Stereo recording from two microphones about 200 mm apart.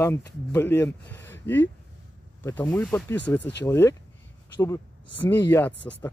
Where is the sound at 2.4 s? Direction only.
15° left (ahead or behind).